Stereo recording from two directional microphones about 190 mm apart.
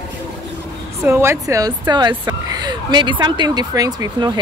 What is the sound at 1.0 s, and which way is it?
Speech, 15° right (ahead or behind).